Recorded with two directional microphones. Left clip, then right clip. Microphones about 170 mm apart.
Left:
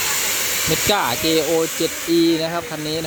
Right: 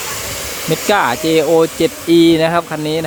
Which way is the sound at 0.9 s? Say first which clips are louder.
Right 7 dB; 5° right (ahead or behind).